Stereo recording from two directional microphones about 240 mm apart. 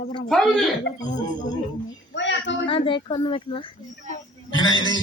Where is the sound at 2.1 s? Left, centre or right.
Left.